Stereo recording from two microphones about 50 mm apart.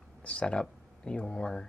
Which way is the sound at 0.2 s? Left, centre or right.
Left.